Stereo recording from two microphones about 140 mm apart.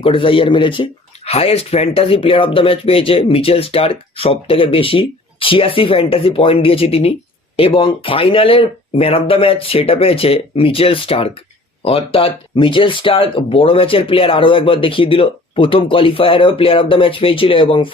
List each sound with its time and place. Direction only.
0.0 s speech: 40° left (ahead or behind)